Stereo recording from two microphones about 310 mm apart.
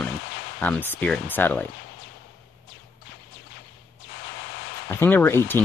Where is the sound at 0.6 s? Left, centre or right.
Centre.